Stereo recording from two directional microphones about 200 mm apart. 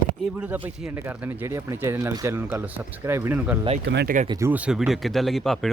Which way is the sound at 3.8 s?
55° right (ahead or behind).